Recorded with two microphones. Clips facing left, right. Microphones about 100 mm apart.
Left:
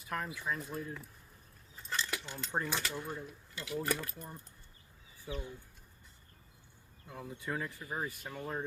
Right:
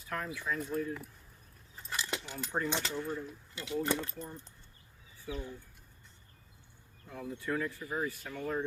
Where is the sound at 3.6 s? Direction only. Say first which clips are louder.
Right 3 dB; 25° right (ahead or behind).